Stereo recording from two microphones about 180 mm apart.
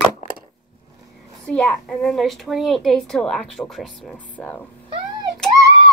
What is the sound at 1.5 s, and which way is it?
A woman's voice, 5° left (ahead or behind).